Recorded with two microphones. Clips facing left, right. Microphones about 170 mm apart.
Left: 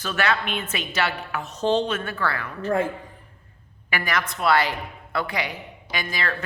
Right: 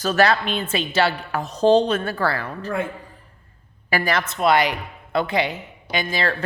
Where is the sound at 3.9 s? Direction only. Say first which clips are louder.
Right 4 dB; 35° right (ahead or behind).